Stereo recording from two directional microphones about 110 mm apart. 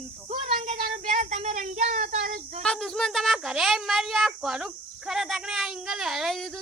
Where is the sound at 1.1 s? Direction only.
90° right.